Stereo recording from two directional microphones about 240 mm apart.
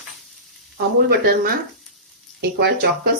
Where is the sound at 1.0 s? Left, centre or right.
Right.